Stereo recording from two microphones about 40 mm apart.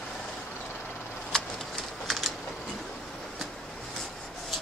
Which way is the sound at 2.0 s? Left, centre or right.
Centre.